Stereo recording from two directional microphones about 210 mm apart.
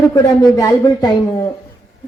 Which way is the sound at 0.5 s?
15° left (ahead or behind).